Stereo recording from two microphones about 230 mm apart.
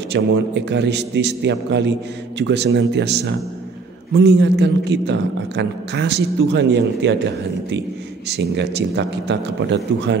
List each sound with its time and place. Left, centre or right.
0.1 s a man's voice: right
8.3 s a man's voice: right